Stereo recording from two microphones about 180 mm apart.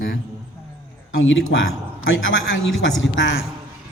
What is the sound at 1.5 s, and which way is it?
Speech, 80° left.